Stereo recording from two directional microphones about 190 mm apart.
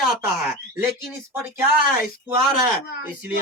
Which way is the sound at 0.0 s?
5° right (ahead or behind).